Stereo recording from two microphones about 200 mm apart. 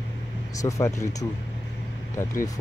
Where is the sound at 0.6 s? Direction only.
15° left (ahead or behind).